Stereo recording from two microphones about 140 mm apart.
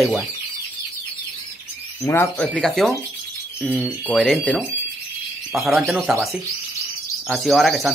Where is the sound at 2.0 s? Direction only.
15° left (ahead or behind); by 3.9 s 5° right (ahead or behind).